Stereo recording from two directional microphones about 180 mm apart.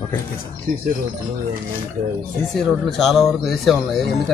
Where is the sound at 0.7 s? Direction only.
50° right (ahead or behind).